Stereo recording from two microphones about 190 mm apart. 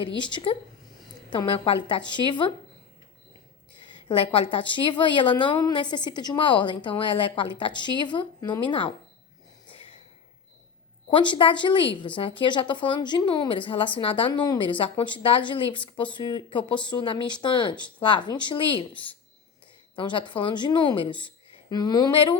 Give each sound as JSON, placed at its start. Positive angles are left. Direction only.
{"t": 0.2, "sound": "a woman's voice", "side_deg": 25}
{"t": 3.8, "sound": "a woman's voice", "side_deg": 25}
{"t": 9.6, "sound": "a sound", "side_deg": 30}
{"t": 11.1, "sound": "a woman's voice", "side_deg": 25}